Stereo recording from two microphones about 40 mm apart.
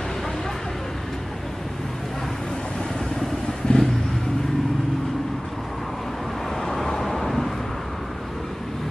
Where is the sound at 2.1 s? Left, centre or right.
Centre.